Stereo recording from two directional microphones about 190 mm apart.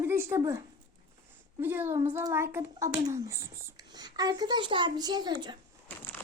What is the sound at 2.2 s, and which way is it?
A child's voice, 15° right (ahead or behind).